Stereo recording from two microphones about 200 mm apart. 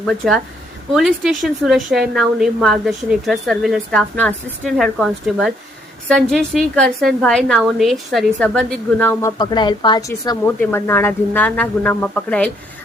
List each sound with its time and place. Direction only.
0.0 s a woman's voice: centre (ahead or behind)
9.4 s speech: 20° left (ahead or behind); by 12.5 s 5° left (ahead or behind)